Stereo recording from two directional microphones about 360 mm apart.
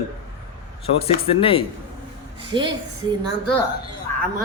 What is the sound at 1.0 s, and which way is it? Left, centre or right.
Speech, centre.